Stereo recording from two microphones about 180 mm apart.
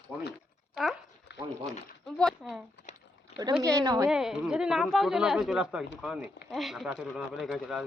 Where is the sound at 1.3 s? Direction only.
70° left (ahead or behind).